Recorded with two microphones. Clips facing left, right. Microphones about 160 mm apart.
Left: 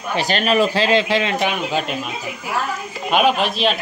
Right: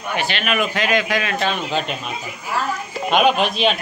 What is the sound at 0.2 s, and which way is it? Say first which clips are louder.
A man's voice: left 6 dB; 40° left (ahead or behind).